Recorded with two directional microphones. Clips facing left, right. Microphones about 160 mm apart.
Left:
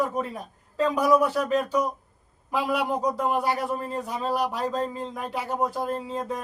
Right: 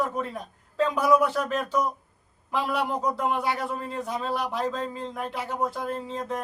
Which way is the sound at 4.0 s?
10° left (ahead or behind).